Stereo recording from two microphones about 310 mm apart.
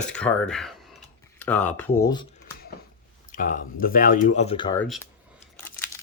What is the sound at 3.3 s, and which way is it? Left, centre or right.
Speech, left.